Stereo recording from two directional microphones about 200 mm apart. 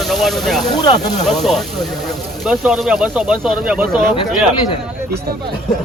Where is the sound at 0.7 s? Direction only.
20° left (ahead or behind).